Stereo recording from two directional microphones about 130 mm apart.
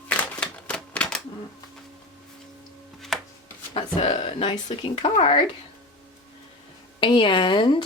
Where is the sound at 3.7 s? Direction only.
50° left (ahead or behind).